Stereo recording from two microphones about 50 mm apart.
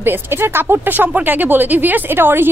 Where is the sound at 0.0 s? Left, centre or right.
Right.